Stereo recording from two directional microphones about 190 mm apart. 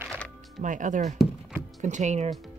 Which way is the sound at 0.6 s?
40° right (ahead or behind).